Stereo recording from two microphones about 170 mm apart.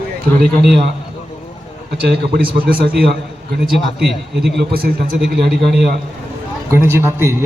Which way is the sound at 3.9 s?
Centre (ahead or behind).